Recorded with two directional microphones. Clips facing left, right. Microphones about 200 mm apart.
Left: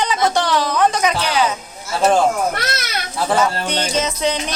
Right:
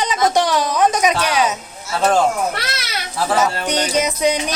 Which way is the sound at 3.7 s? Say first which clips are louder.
Right 2 dB; 15° right (ahead or behind).